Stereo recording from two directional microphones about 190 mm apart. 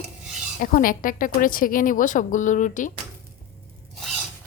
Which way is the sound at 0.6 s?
50° left (ahead or behind).